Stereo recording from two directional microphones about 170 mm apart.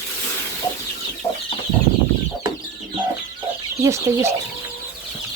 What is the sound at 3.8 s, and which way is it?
Speech, 15° right (ahead or behind).